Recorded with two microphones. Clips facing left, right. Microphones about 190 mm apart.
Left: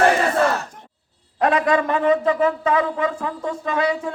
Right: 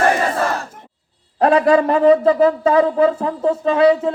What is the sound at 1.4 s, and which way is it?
A man's voice, 35° right (ahead or behind).